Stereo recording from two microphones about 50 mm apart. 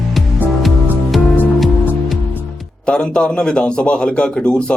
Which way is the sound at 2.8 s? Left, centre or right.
Centre.